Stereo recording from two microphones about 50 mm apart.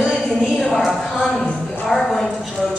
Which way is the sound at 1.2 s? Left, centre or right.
Centre.